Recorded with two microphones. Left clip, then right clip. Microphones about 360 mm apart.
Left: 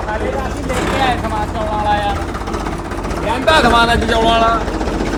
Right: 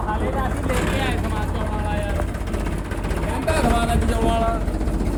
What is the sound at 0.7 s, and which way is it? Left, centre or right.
Vehicle, centre.